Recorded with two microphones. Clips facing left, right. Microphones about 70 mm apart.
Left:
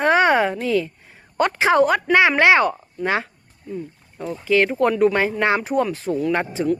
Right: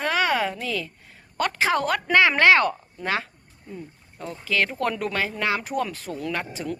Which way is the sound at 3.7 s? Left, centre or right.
Right.